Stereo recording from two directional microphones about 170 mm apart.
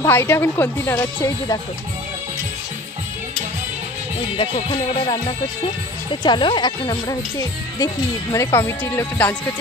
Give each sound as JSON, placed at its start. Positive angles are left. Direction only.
{"t": 0.0, "sound": "a woman's voice", "side_deg": 15}
{"t": 4.4, "sound": "music", "side_deg": 30}
{"t": 6.2, "sound": "speech", "side_deg": 25}